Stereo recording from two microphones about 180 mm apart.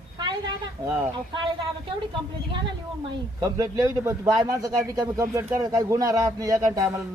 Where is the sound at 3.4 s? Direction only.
15° right (ahead or behind).